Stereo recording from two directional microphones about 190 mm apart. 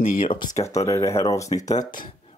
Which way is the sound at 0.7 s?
15° left (ahead or behind).